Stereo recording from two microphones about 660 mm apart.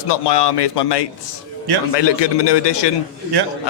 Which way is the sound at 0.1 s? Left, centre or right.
Left.